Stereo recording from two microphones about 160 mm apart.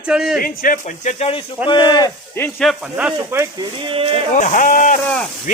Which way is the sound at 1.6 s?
30° left (ahead or behind).